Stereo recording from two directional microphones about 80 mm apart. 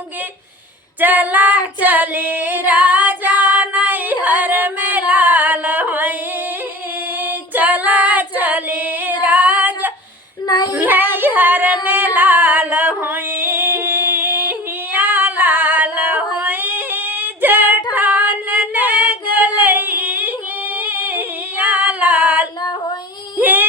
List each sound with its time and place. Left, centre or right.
0.9 s female singing: right
7.3 s female singing: right
10.4 s child singing: left
10.7 s singing: right
14.9 s female singing: right
17.9 s singing: right
20.8 s female singing: right
23.4 s yodeling: right